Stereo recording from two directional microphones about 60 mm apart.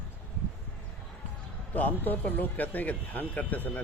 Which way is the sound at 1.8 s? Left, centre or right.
Left.